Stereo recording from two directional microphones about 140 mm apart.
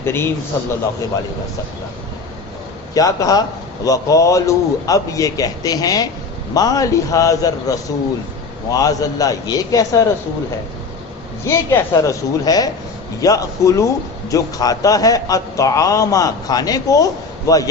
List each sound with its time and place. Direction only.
0.0 s a man's voice: 15° left (ahead or behind)
2.9 s a man's voice: 25° left (ahead or behind)
11.4 s a man's voice: 20° left (ahead or behind)